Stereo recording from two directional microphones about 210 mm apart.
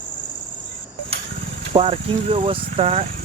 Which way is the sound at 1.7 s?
25° right (ahead or behind).